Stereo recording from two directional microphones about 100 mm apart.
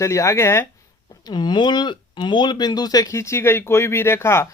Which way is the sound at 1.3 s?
50° left (ahead or behind).